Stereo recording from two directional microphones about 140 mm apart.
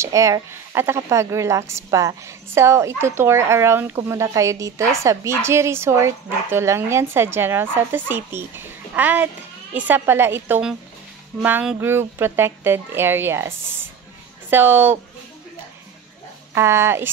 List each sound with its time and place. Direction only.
0.0 s a woman's voice: 20° right (ahead or behind)
16.5 s speech: 20° right (ahead or behind)